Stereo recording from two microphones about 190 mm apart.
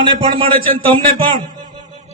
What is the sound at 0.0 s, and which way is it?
Speech, 25° right (ahead or behind).